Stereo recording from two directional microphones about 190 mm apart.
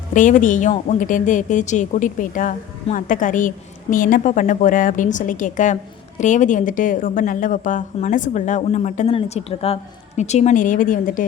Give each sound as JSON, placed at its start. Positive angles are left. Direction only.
{"t": 0.1, "sound": "a woman's voice", "side_deg": 40}